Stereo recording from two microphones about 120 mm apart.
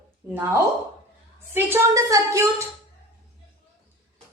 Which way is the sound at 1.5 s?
20° right (ahead or behind).